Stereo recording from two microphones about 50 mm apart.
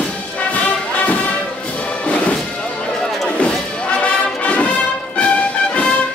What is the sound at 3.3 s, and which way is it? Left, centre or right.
Music, left.